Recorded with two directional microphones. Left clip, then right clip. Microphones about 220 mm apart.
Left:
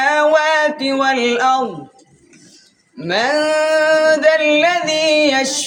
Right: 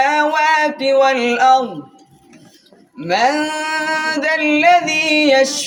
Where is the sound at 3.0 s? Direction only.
15° left (ahead or behind).